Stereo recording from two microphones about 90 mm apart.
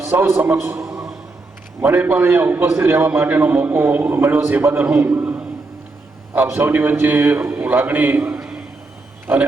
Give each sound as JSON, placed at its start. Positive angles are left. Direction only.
{"t": 0.0, "sound": "a man's voice", "side_deg": -30}
{"t": 0.8, "sound": "a sound", "side_deg": -35}
{"t": 1.8, "sound": "a man's voice", "side_deg": -20}